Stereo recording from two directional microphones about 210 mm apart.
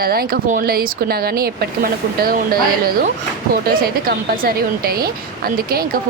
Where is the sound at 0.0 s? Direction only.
45° right (ahead or behind).